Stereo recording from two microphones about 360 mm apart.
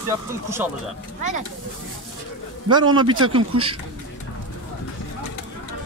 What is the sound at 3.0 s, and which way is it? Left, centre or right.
Speech, centre.